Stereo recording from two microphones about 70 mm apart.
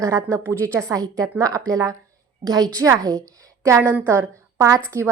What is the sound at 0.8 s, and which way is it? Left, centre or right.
A woman's voice, right.